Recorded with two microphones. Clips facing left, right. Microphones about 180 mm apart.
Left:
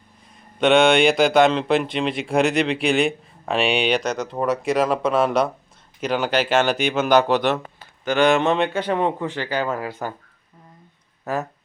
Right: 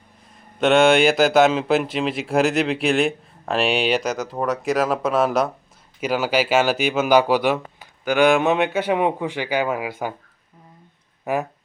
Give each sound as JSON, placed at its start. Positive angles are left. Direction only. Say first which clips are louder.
{"t": 0.6, "sound": "speech", "louder": "even", "side_deg": 0}
{"t": 11.3, "sound": "speech", "louder": "right 2 dB", "side_deg": -15}